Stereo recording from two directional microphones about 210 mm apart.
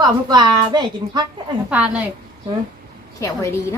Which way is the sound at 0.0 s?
20° right (ahead or behind).